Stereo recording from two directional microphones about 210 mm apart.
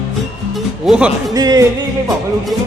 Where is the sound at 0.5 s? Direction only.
5° right (ahead or behind).